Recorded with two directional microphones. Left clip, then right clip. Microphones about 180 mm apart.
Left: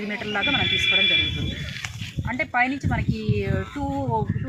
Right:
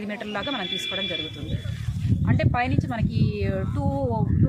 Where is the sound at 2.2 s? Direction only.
30° right (ahead or behind).